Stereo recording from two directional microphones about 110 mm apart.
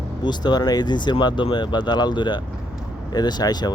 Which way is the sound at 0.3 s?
40° left (ahead or behind).